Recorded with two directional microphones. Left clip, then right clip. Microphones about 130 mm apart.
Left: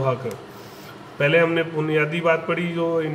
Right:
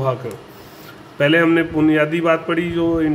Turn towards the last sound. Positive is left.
turn(degrees=-45)  # may be behind; listen again after turning